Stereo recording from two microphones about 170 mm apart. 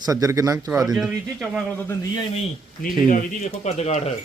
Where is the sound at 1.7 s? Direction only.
15° left (ahead or behind).